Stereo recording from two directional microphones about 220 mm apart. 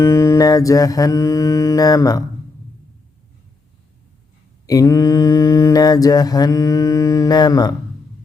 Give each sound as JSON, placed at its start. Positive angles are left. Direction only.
{"t": 0.0, "sound": "mantra", "side_deg": 15}
{"t": 4.6, "sound": "mantra", "side_deg": 15}